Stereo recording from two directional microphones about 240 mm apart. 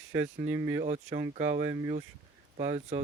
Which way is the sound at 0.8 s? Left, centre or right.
Right.